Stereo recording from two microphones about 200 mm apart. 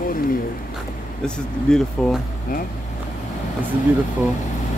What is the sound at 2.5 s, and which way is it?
Speech, 45° left (ahead or behind).